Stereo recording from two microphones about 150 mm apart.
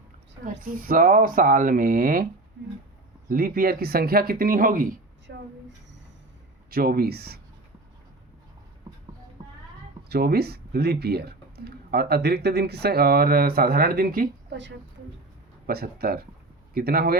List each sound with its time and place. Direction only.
0.4 s speech: 65° right (ahead or behind)
3.2 s speech: 85° right; by 4.9 s 65° right (ahead or behind)
5.3 s speech: 90° right
6.7 s speech: 80° right
10.1 s speech: 90° right; by 14.3 s 75° right (ahead or behind)
15.6 s speech: 90° right